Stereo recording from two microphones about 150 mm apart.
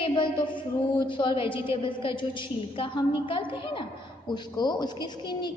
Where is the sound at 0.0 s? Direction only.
35° left (ahead or behind).